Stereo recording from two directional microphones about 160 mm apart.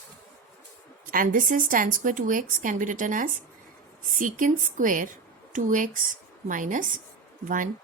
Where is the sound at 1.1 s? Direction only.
60° right (ahead or behind).